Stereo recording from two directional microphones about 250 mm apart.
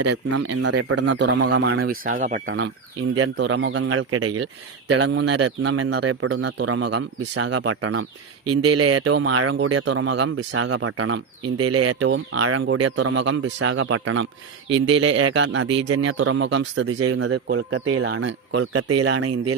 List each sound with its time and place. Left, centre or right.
0.5 s speech: right
0.8 s speech: right
3.2 s speech: right
6.2 s speech: right
8.4 s speech: right
14.7 s speech: centre
14.9 s speech: right
17.5 s speech: right